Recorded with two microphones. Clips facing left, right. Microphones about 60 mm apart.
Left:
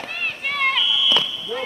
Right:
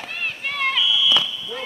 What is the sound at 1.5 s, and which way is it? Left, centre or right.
Speech, centre.